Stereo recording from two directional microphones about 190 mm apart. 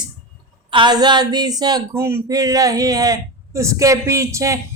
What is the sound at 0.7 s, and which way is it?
Speech, 25° right (ahead or behind).